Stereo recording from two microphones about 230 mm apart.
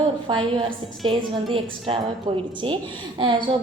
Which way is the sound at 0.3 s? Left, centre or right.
Right.